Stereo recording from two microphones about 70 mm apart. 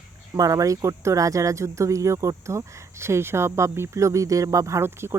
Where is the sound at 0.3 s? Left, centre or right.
Right.